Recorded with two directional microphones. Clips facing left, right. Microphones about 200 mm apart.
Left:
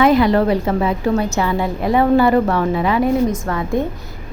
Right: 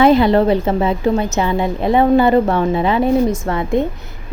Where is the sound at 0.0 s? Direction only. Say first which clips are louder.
Right 2 dB; 25° right (ahead or behind).